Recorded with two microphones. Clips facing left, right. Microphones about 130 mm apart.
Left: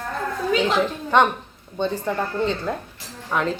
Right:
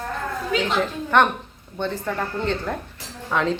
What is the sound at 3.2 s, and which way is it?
Speech, 5° left (ahead or behind).